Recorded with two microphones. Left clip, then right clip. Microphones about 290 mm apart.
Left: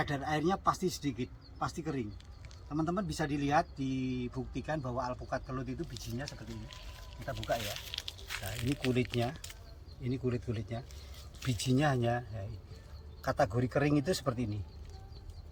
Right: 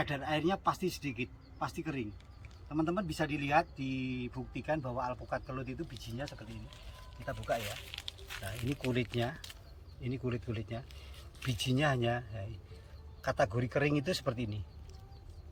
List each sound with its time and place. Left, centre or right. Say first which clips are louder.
0.0 s speech: left 1 dB; centre
7.3 s a man's voice: left 1 dB; centre